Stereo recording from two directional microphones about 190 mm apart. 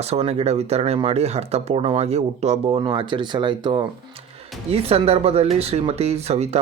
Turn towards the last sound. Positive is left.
turn(degrees=-35)  # may be behind; listen again after turning